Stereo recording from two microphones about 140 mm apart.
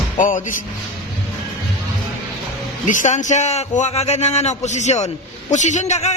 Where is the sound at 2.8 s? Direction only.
65° left (ahead or behind).